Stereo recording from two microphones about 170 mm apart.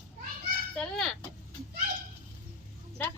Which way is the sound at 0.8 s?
5° left (ahead or behind).